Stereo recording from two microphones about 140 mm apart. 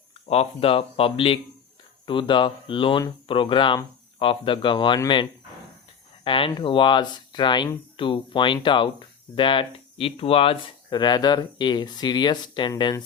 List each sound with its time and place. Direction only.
0.3 s speech: 45° left (ahead or behind)
6.2 s speech: 40° left (ahead or behind)